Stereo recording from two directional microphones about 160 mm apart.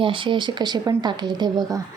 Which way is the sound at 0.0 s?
30° right (ahead or behind).